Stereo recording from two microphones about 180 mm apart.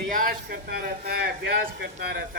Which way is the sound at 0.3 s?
55° right (ahead or behind).